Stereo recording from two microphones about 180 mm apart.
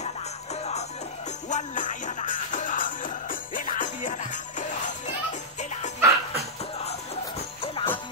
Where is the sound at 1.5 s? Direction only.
45° left (ahead or behind).